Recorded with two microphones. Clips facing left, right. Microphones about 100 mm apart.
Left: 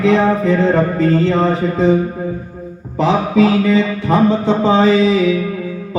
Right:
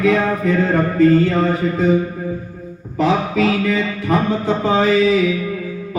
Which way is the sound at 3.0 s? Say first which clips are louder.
Left 3 dB; 25° left (ahead or behind).